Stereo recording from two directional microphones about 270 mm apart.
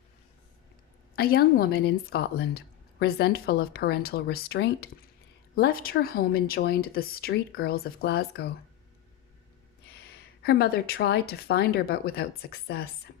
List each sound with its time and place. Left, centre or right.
1.1 s speech: left
9.9 s speech: left